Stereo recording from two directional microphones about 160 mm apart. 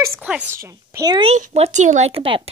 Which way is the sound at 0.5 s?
20° right (ahead or behind).